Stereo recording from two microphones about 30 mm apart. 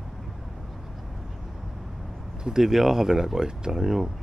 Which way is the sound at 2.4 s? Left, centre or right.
Centre.